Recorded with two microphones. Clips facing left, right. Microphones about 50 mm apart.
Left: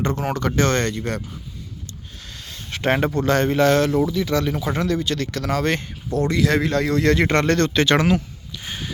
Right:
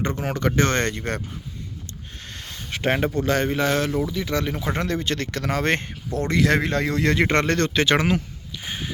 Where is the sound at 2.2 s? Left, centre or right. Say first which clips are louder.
Right 1 dB; right.